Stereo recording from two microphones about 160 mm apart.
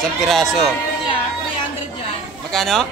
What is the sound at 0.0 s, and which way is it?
Speech, centre (ahead or behind).